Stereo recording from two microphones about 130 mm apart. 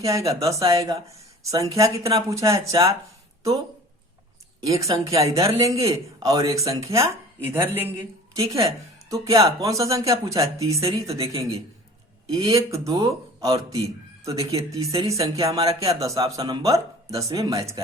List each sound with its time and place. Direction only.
0.0 s speech: 25° right (ahead or behind)
4.6 s speech: 25° right (ahead or behind)